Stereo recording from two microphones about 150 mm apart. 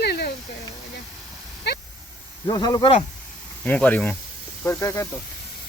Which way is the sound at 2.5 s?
25° left (ahead or behind).